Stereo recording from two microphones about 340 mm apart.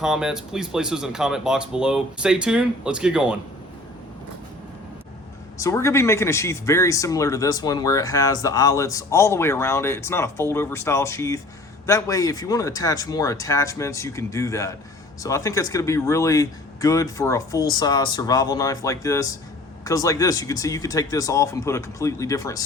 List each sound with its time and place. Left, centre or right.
0.0 s speech: centre
5.5 s speech: centre